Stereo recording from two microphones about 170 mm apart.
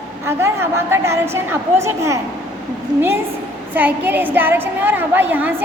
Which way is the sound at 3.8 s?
10° right (ahead or behind).